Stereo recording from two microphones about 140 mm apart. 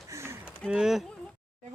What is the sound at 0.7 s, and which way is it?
Speech, 5° right (ahead or behind).